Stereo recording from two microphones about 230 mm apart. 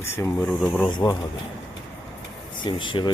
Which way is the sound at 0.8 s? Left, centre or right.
Centre.